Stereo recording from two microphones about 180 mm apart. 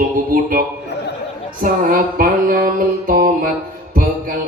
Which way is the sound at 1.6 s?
50° right (ahead or behind).